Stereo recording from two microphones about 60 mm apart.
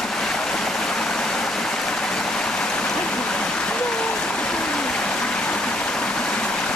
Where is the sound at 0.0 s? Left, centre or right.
Centre.